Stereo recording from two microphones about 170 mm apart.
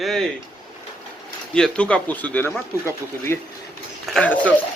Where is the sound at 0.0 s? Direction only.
Centre (ahead or behind).